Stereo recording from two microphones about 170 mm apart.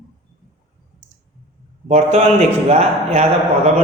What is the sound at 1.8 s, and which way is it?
A man's voice, 40° right (ahead or behind).